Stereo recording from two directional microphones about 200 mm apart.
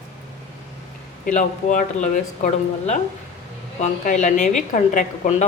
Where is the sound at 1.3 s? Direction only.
40° left (ahead or behind).